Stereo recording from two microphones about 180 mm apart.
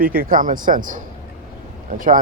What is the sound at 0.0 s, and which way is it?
Speech, 55° right (ahead or behind).